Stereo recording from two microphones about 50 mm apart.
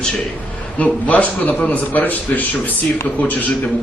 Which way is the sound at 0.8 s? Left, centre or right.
Left.